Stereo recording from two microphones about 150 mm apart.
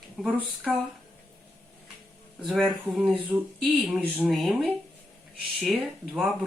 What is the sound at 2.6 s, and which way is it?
Speech, 10° right (ahead or behind).